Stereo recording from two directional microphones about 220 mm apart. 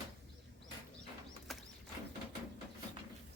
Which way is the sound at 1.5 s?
Centre (ahead or behind).